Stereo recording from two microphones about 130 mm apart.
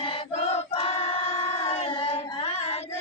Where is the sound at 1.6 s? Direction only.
55° left (ahead or behind).